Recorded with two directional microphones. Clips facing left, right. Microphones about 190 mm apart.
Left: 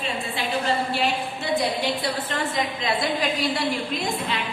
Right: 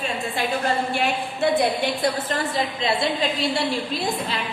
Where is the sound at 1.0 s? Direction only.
50° right (ahead or behind).